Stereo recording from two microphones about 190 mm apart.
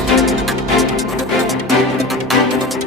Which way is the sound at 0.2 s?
Centre (ahead or behind).